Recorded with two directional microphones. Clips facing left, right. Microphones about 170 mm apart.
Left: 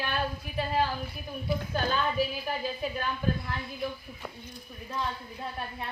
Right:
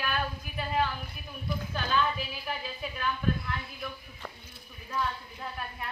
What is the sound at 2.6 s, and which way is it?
Speech, 35° left (ahead or behind).